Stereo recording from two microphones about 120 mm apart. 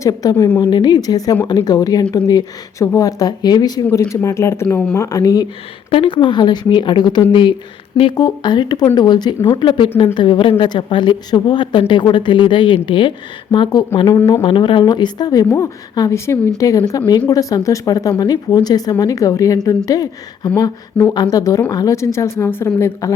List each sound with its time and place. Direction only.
0.0 s speech: 30° left (ahead or behind)
4.1 s speech: 25° left (ahead or behind)
5.9 s a woman's voice: 45° left (ahead or behind); by 23.1 s 25° left (ahead or behind)